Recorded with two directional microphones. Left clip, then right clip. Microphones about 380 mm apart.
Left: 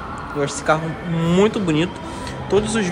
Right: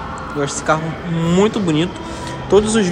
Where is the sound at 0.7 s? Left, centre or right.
Centre.